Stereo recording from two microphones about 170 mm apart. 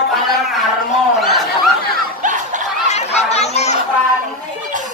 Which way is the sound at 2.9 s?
40° left (ahead or behind).